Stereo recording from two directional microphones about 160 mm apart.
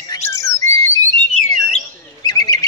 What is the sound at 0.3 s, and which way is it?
Squawk, 20° left (ahead or behind).